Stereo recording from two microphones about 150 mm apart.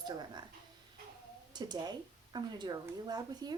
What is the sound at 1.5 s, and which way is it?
Speech, 30° right (ahead or behind).